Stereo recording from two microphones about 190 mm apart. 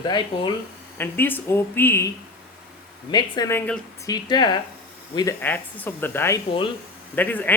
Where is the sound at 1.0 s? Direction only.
10° left (ahead or behind).